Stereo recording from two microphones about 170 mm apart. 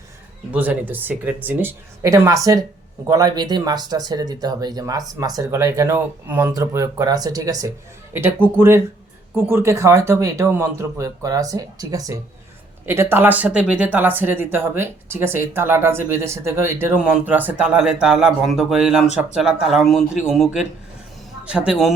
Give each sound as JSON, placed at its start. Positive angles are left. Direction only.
{"t": 0.5, "sound": "speech", "side_deg": -10}